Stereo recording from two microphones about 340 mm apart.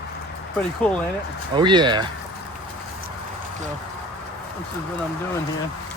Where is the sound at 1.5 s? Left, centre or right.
Centre.